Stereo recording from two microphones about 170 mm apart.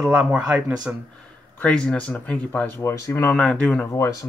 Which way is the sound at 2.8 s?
15° left (ahead or behind).